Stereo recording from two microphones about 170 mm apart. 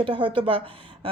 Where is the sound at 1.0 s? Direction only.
30° right (ahead or behind).